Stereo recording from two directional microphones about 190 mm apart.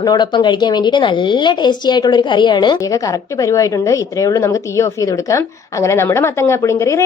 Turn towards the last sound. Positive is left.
turn(degrees=15)  # may be behind; listen again after turning